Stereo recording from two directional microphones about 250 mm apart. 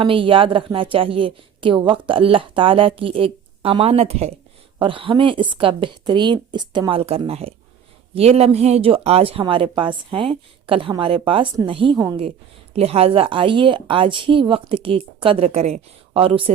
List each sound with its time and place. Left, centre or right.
0.0 s a woman's voice: right